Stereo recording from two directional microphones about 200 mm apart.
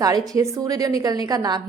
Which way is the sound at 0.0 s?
20° right (ahead or behind).